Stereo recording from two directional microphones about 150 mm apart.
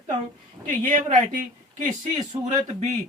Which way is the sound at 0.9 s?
55° right (ahead or behind).